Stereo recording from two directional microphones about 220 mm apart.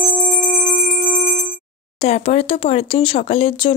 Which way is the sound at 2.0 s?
30° left (ahead or behind).